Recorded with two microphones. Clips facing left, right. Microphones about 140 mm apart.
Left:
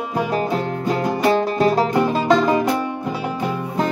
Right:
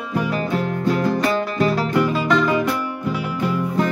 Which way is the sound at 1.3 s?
40° left (ahead or behind).